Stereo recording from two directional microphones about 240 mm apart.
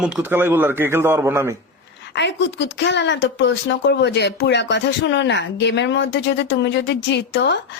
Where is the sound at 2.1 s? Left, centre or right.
Left.